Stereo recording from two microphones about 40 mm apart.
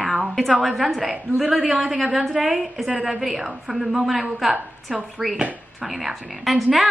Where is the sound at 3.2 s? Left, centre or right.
Centre.